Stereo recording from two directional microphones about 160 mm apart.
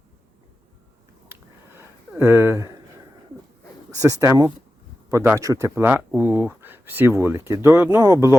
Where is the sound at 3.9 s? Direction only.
20° right (ahead or behind).